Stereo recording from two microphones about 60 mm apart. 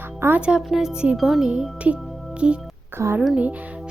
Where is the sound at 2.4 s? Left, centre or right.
Centre.